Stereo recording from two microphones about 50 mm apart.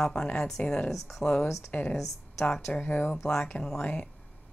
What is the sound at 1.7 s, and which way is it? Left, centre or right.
Speech, left.